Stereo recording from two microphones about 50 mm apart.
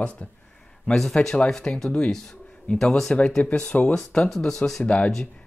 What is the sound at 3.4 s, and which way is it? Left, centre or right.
Speech, left.